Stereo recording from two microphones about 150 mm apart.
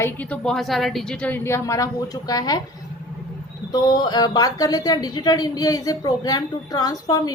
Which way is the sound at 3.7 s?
25° left (ahead or behind).